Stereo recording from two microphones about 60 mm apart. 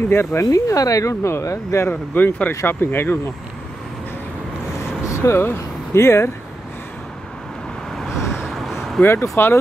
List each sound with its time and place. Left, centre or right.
0.1 s speech: left
0.5 s speech: left
2.1 s speech: left
2.6 s speech: left
5.0 s vehicle: left
5.9 s speech: left
8.2 s vehicle: left
8.5 s vehicle: centre
9.0 s speech: left